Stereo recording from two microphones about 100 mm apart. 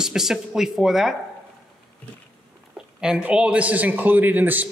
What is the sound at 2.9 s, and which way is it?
A man's voice, 5° right (ahead or behind).